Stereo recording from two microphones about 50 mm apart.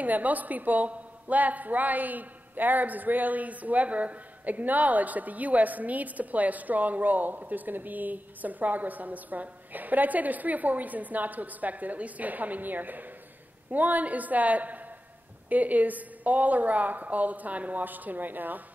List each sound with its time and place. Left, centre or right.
0.0 s a woman's voice: right